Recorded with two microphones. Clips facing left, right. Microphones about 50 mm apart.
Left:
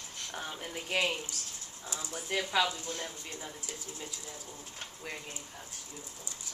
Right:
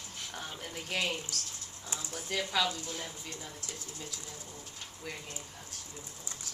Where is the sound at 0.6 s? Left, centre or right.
Centre.